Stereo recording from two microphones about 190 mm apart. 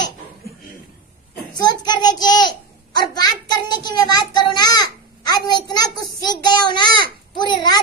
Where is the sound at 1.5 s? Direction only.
20° left (ahead or behind).